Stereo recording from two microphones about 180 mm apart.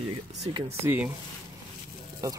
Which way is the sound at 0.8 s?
10° right (ahead or behind).